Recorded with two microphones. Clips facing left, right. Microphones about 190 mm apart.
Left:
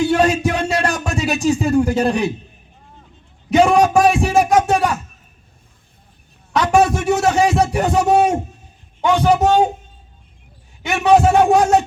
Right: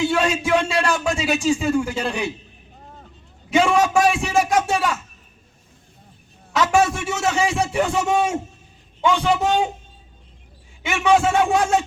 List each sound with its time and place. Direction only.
0.1 s speech: 40° left (ahead or behind)
3.5 s speech: 40° left (ahead or behind)
6.6 s a man's voice: 40° left (ahead or behind)
10.8 s speech: 40° left (ahead or behind)